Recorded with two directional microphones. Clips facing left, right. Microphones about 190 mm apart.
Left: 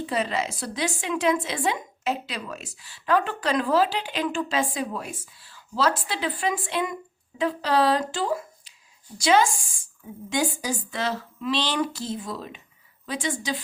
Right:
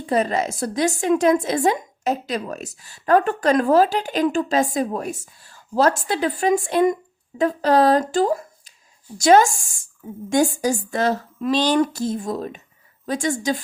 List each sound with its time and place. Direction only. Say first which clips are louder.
0.0 s a woman's voice: right 6 dB; 45° right (ahead or behind)